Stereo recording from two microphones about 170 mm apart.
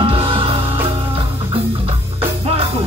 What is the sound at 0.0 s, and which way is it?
Music, 30° right (ahead or behind).